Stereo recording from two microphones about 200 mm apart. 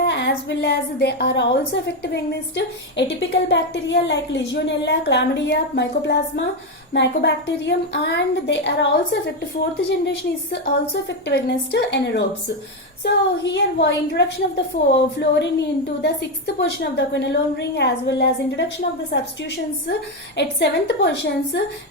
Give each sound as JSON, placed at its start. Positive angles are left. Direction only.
{"t": 0.0, "sound": "a sound", "side_deg": 60}
{"t": 2.0, "sound": "a woman's voice", "side_deg": 60}
{"t": 11.3, "sound": "a woman's voice", "side_deg": 60}